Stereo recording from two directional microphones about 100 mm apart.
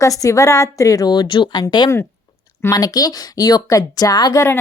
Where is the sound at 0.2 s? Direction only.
30° left (ahead or behind).